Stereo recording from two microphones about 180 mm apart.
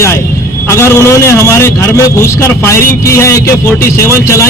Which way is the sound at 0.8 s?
15° left (ahead or behind).